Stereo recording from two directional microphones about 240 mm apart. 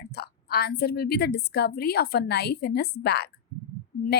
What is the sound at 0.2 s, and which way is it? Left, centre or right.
A woman's voice, left.